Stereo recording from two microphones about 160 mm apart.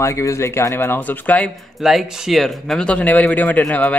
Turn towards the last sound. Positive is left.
turn(degrees=10)  # may be behind; listen again after turning